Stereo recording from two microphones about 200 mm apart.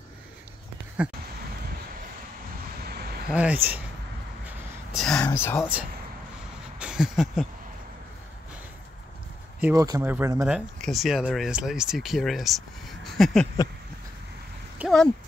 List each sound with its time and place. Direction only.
1.0 s speech: 5° right (ahead or behind)
2.9 s vehicle: 50° right (ahead or behind)
3.3 s speech: 5° right (ahead or behind)
4.6 s speech: centre (ahead or behind)
5.6 s speech: 5° right (ahead or behind)
6.8 s a sound: 5° right (ahead or behind)
9.6 s speech: 15° right (ahead or behind)
10.5 s speech: centre (ahead or behind)
14.8 s speech: centre (ahead or behind)